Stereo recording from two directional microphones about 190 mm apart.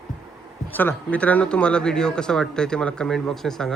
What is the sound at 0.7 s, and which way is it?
Speech, 10° left (ahead or behind).